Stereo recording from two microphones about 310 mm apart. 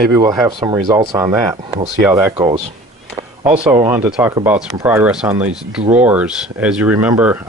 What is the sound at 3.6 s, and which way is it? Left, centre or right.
Speech, centre.